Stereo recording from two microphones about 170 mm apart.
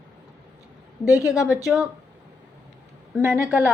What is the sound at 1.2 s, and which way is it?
Speech, 5° right (ahead or behind).